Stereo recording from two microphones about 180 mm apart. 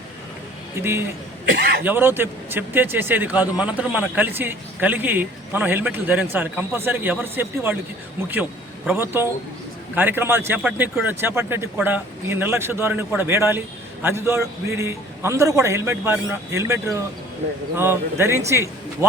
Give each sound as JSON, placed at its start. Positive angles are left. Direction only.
{"t": 0.8, "sound": "speech", "side_deg": -15}
{"t": 1.5, "sound": "speech", "side_deg": -65}
{"t": 1.8, "sound": "speech", "side_deg": -10}
{"t": 8.9, "sound": "speech", "side_deg": -10}